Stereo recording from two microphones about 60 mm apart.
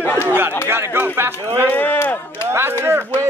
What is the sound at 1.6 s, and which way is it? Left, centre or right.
Speech, left.